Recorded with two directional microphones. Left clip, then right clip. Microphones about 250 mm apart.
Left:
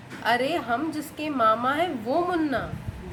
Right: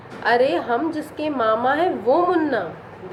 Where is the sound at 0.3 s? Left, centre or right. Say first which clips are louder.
Right 6 dB; centre.